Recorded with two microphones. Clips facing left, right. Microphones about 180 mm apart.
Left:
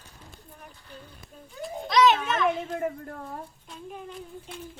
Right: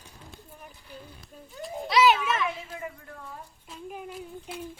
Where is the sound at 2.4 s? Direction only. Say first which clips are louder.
Left 8 dB; 50° left (ahead or behind).